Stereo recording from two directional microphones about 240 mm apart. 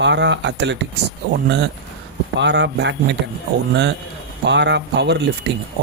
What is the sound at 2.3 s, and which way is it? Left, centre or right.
Speech, right.